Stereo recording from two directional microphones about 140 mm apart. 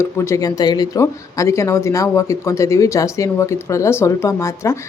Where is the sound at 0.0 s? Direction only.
20° left (ahead or behind).